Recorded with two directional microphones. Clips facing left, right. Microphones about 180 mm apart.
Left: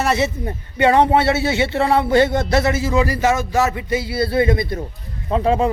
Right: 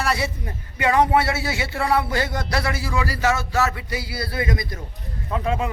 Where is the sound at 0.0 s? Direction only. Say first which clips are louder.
Left 6 dB; 25° left (ahead or behind).